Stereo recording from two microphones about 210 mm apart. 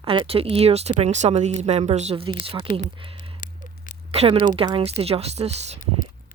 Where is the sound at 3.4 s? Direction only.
40° left (ahead or behind).